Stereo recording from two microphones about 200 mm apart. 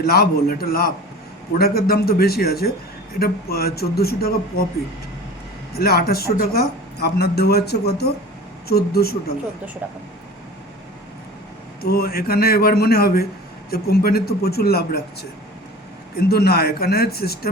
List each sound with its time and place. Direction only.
0.0 s a man's voice: 50° left (ahead or behind)
5.7 s a man's voice: 50° left (ahead or behind)
11.8 s a man's voice: 50° left (ahead or behind)